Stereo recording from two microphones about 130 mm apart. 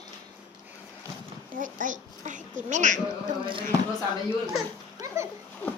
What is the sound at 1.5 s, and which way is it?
A child's voice, 90° right.